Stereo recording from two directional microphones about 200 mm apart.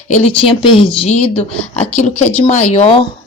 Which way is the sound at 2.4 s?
30° left (ahead or behind).